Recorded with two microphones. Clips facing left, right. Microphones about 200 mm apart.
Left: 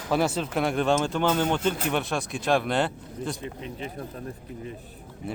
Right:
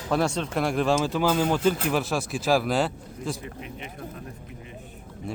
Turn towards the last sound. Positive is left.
turn(degrees=5)  # may be behind; listen again after turning